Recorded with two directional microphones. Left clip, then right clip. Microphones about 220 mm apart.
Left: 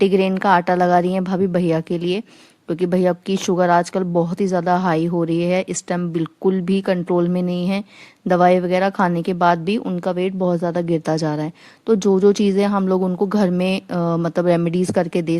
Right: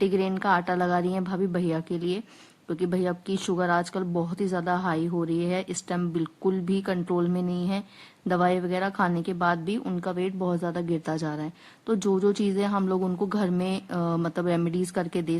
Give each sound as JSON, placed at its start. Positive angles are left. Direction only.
{"t": 0.0, "sound": "a woman's voice", "side_deg": 30}